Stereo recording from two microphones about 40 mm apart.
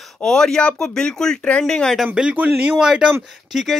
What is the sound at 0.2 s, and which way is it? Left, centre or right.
Speech, centre.